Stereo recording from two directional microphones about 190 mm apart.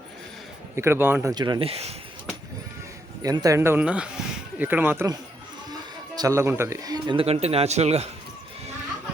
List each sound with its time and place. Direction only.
0.8 s speech: 10° right (ahead or behind); by 2.0 s 35° right (ahead or behind)
3.2 s speech: 20° right (ahead or behind); by 8.1 s 35° right (ahead or behind)